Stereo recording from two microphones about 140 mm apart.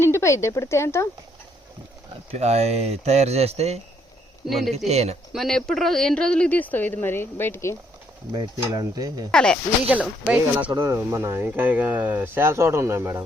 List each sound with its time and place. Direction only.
0.0 s speech: 20° left (ahead or behind)
2.3 s speech: 50° right (ahead or behind)
4.4 s speech: centre (ahead or behind)
4.9 s speech: 50° right (ahead or behind)
5.3 s speech: centre (ahead or behind); by 7.8 s 20° left (ahead or behind)
8.3 s speech: 30° right (ahead or behind)
9.3 s speech: 5° left (ahead or behind)
9.9 s speech: 10° right (ahead or behind)
10.7 s speech: 25° right (ahead or behind)